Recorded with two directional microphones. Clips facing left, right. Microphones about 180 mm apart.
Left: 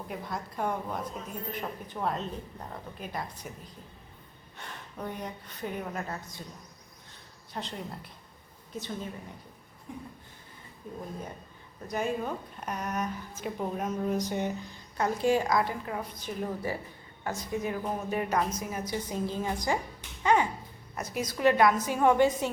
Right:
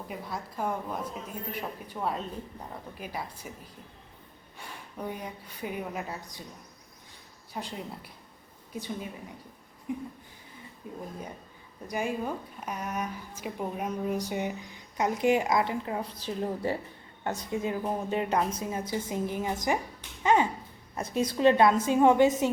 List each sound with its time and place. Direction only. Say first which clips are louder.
0.1 s a woman's voice: left 1 dB; centre (ahead or behind)
1.9 s a woman's voice: even; 5° right (ahead or behind)
4.5 s a woman's voice: right 1 dB; 10° right (ahead or behind)
7.5 s a woman's voice: even; 10° right (ahead or behind)
11.9 s a woman's voice: even; 10° right (ahead or behind)